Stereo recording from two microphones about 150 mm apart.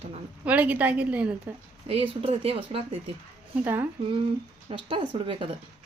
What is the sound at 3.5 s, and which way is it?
Speech, 10° right (ahead or behind).